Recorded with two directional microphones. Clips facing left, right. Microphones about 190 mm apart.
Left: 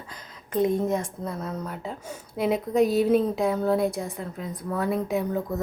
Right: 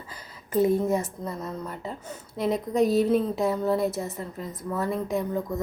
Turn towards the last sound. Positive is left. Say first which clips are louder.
# left 1 dB
turn(degrees=5)  # may be behind; listen again after turning